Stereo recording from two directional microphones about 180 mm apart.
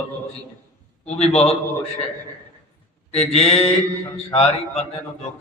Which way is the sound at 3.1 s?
35° left (ahead or behind).